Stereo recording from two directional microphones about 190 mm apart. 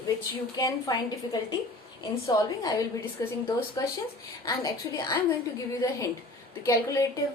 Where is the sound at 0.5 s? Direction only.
20° left (ahead or behind).